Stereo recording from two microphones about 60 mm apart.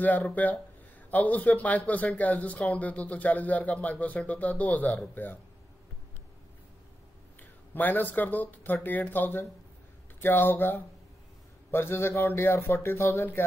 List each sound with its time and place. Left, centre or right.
0.0 s speech: left
7.3 s speech: left